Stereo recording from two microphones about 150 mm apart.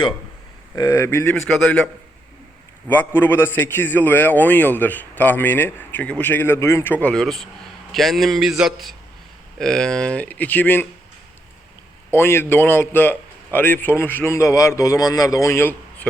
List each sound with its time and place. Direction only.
0.8 s a man's voice: 20° left (ahead or behind)
2.8 s a man's voice: 10° left (ahead or behind)
12.1 s a man's voice: 15° left (ahead or behind)